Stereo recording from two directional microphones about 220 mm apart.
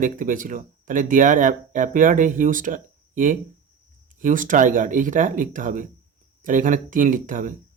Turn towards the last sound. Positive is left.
turn(degrees=-35)  # may be behind; listen again after turning